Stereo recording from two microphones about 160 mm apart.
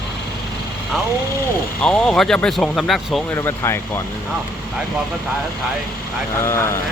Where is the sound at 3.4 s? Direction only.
15° left (ahead or behind).